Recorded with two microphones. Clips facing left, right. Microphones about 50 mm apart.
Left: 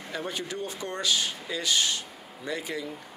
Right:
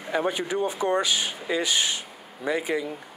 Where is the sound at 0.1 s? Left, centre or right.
Right.